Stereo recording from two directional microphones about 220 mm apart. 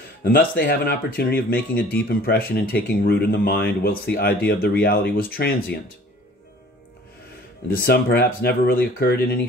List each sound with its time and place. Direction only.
0.2 s speech: 45° left (ahead or behind)
7.8 s speech: 45° left (ahead or behind)